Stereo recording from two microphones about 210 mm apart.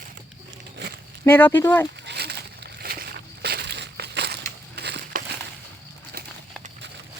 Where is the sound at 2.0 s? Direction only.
50° right (ahead or behind).